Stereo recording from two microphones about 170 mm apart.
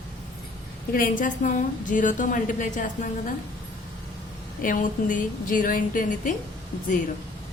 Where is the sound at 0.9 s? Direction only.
55° left (ahead or behind).